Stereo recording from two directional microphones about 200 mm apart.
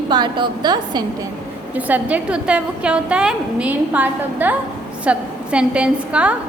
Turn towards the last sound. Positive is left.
turn(degrees=-5)  # may be behind; listen again after turning